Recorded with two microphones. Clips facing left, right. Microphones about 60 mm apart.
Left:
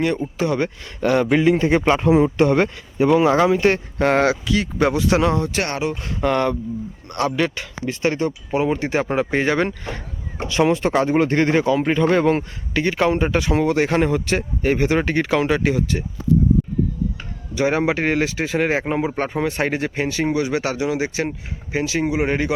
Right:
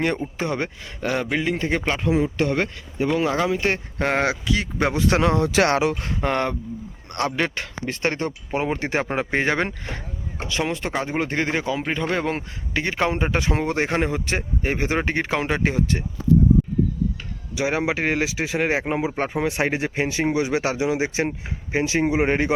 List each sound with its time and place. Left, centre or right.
0.4 s speech: right
1.0 s speech: centre
1.3 s speech: centre
1.9 s speech: left
2.6 s speech: centre
3.4 s speech: centre
4.0 s speech: centre
4.9 s speech: right
5.4 s speech: right
6.2 s speech: right
10.5 s speech: centre
12.7 s speech: right
17.5 s speech: centre; by 22.5 s right